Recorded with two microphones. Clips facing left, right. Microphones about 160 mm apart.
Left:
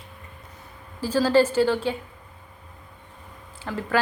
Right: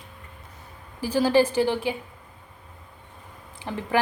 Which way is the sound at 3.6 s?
20° right (ahead or behind).